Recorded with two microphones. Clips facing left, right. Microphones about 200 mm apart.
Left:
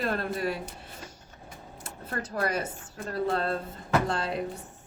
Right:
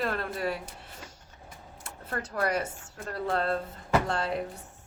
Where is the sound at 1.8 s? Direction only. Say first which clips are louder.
Left 1 dB; 20° left (ahead or behind).